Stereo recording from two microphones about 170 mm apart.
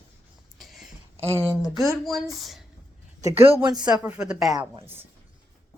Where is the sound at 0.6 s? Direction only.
Centre (ahead or behind).